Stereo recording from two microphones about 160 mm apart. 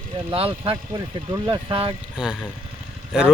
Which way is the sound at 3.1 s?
5° right (ahead or behind).